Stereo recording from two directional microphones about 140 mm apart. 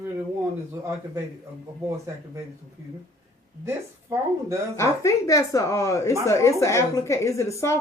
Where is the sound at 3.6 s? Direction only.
20° right (ahead or behind).